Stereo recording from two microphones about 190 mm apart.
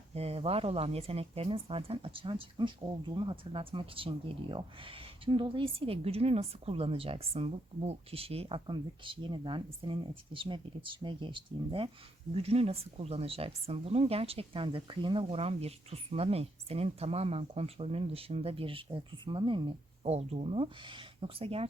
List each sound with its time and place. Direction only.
0.1 s speech: 30° right (ahead or behind)